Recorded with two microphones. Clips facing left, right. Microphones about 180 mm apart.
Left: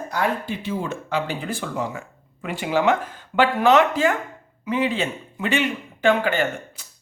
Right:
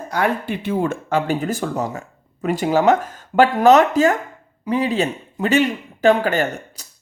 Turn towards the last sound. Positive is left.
turn(degrees=-40)  # may be behind; listen again after turning